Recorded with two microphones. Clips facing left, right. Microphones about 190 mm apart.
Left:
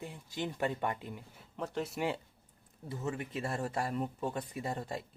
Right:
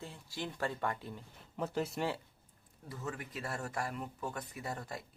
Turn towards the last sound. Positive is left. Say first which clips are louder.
# left 4 dB
turn(degrees=25)  # may be behind; listen again after turning